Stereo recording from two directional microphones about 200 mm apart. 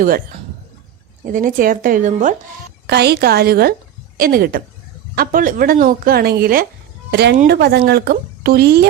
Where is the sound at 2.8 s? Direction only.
55° right (ahead or behind).